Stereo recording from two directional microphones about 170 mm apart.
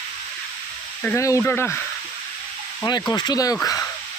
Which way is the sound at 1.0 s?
15° left (ahead or behind).